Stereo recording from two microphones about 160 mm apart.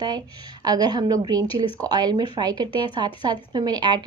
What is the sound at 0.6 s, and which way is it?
Speech, 25° right (ahead or behind).